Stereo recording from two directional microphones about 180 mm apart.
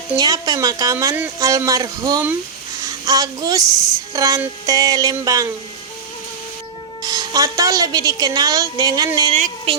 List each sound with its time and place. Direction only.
0.2 s a woman's voice: 20° right (ahead or behind)
7.0 s a woman's voice: 20° right (ahead or behind)
9.3 s speech: 35° right (ahead or behind)